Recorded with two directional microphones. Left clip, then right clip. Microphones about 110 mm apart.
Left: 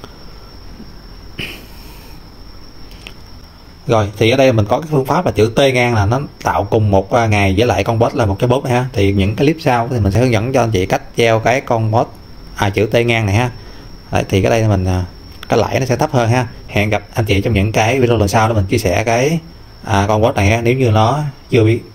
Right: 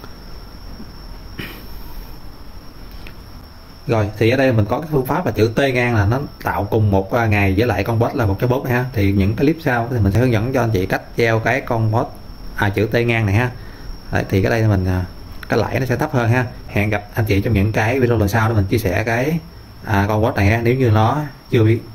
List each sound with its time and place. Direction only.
3.8 s speech: 20° left (ahead or behind)